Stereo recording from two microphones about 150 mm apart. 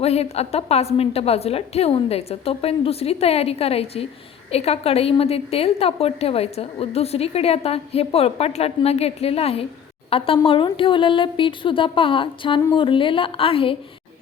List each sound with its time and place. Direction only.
0.0 s a woman's voice: 45° left (ahead or behind)